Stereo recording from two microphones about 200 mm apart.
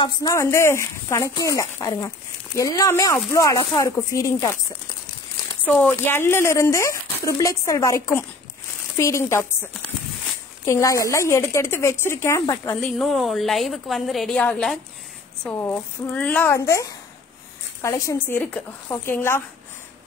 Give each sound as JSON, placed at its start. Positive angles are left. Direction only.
{"t": 0.0, "sound": "speech", "side_deg": 15}
{"t": 5.7, "sound": "speech", "side_deg": 10}
{"t": 13.0, "sound": "a woman's voice", "side_deg": 0}
{"t": 17.8, "sound": "speech", "side_deg": 15}